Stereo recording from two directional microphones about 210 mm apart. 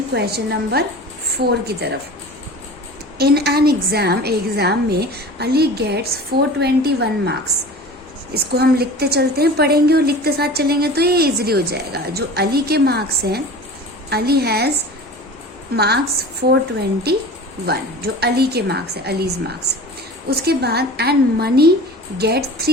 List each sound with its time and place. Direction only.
0.1 s a woman's voice: 50° right (ahead or behind)
3.2 s a woman's voice: 50° right (ahead or behind)
15.7 s a woman's voice: 50° right (ahead or behind)
17.7 s a woman's voice: 50° right (ahead or behind)